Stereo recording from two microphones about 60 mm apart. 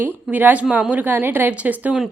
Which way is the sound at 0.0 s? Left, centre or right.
Right.